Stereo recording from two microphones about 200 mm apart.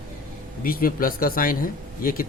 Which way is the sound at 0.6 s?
45° left (ahead or behind).